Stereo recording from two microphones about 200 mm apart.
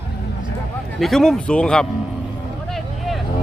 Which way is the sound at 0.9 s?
Centre (ahead or behind).